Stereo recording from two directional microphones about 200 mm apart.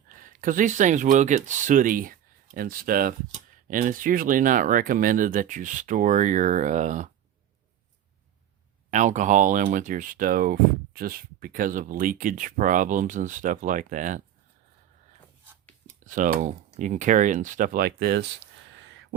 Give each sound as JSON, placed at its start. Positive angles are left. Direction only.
{"t": 0.1, "sound": "speech", "side_deg": -40}
{"t": 8.9, "sound": "speech", "side_deg": -40}
{"t": 16.0, "sound": "speech", "side_deg": -40}